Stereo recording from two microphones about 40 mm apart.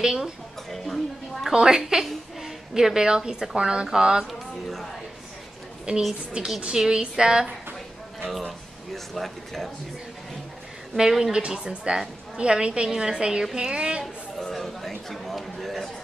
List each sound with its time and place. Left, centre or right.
0.0 s a woman's voice: centre
0.7 s a sound: centre
1.5 s a woman's voice: centre
4.3 s speech: centre
6.4 s a woman's voice: right
8.3 s speech: centre
11.0 s a woman's voice: centre
11.3 s a woman's voice: right
14.0 s chatter: centre